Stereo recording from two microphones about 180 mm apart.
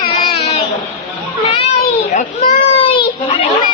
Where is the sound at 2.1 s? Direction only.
35° left (ahead or behind).